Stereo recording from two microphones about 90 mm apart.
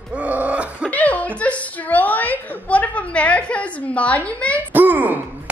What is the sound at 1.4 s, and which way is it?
A woman's voice, 15° left (ahead or behind).